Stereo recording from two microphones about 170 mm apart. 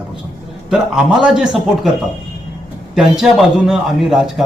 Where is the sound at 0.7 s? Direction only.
5° right (ahead or behind).